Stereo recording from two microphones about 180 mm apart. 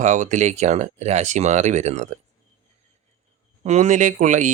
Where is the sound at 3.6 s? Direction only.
40° right (ahead or behind).